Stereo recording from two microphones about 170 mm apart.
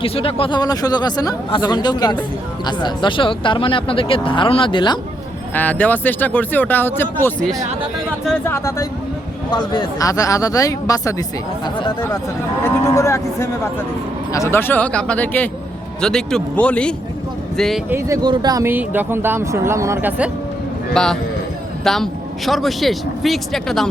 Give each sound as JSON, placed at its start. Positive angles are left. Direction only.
{"t": 0.0, "sound": "speech", "side_deg": 35}
{"t": 5.5, "sound": "speech", "side_deg": 10}
{"t": 8.4, "sound": "speech", "side_deg": 15}
{"t": 12.6, "sound": "speech", "side_deg": 15}
{"t": 17.8, "sound": "speech", "side_deg": -15}
{"t": 20.9, "sound": "speech", "side_deg": 5}